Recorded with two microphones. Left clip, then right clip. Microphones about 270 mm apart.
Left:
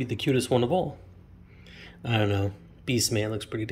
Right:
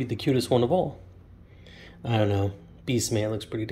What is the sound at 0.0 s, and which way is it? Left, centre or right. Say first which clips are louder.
Speech: even; centre.